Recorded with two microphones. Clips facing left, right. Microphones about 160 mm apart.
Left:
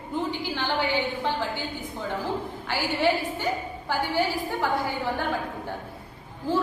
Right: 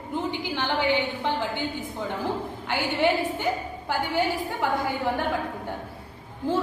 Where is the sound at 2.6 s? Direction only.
20° right (ahead or behind).